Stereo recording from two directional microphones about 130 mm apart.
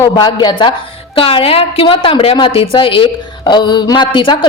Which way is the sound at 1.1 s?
45° left (ahead or behind).